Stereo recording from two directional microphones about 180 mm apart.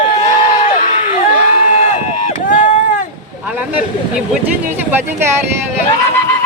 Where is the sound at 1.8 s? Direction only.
45° left (ahead or behind).